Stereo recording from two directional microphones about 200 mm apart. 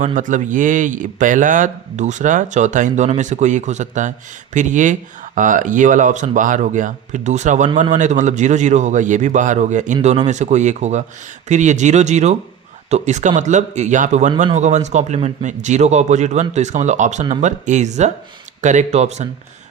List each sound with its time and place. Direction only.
0.2 s speech: 40° right (ahead or behind)